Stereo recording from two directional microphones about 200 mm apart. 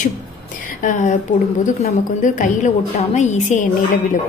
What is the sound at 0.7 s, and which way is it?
A woman's voice, 40° left (ahead or behind).